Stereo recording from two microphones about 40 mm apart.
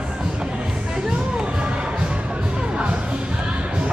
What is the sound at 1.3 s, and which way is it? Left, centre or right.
Music, right.